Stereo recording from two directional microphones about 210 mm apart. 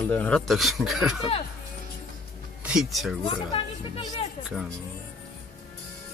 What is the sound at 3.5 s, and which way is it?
Speech, 25° left (ahead or behind).